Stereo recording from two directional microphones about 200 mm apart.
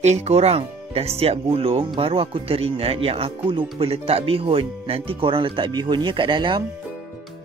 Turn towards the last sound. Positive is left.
turn(degrees=-25)  # may be behind; listen again after turning